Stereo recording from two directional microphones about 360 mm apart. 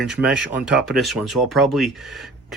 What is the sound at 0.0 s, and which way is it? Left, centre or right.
Speech, centre.